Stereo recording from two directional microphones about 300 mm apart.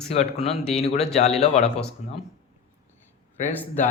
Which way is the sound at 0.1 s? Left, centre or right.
Centre.